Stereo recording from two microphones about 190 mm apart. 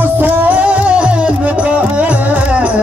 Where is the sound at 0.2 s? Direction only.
10° right (ahead or behind).